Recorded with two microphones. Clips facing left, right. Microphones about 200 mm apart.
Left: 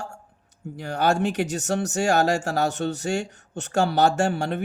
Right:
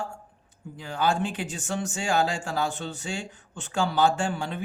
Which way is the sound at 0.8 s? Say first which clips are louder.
Left 4 dB; 70° left (ahead or behind).